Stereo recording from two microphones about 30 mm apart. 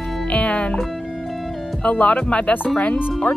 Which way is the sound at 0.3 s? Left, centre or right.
Left.